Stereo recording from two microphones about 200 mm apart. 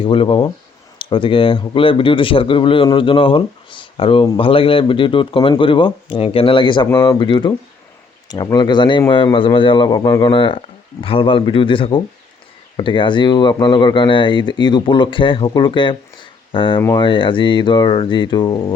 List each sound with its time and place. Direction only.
0.0 s speech: 25° left (ahead or behind)